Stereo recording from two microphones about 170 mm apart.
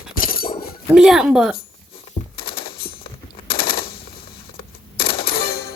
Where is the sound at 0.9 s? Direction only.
5° right (ahead or behind).